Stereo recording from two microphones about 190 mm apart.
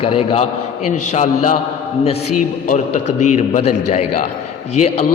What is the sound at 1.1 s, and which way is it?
Speech, 40° left (ahead or behind).